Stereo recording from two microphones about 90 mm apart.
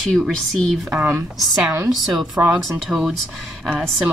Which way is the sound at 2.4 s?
20° right (ahead or behind).